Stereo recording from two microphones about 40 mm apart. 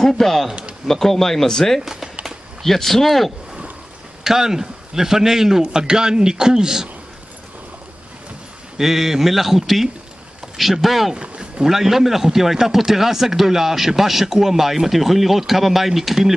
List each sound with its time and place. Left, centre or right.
0.0 s speech: centre
4.2 s speech: centre
8.7 s speech: centre
11.1 s a sound: right
11.6 s speech: centre